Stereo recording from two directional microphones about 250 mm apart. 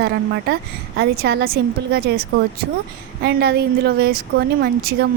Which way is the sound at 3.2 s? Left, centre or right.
Right.